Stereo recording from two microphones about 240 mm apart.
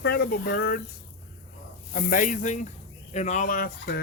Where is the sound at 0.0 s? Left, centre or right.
Left.